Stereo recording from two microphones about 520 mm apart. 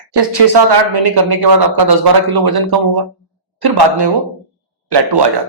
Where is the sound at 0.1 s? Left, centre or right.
Right.